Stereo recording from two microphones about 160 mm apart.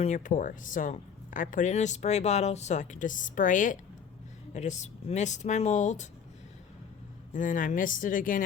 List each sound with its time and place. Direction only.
0.0 s speech: 50° left (ahead or behind)
7.3 s speech: 55° left (ahead or behind)